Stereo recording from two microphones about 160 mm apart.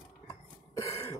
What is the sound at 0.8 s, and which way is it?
Throat clearing, 20° left (ahead or behind).